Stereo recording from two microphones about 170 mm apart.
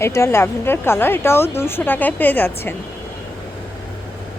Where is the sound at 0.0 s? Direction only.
15° left (ahead or behind).